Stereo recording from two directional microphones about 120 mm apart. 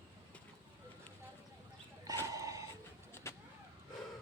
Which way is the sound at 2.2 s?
25° right (ahead or behind).